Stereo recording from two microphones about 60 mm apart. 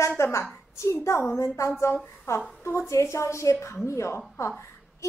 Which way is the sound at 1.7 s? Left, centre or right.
Left.